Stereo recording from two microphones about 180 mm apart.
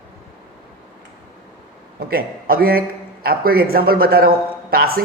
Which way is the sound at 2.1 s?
55° right (ahead or behind).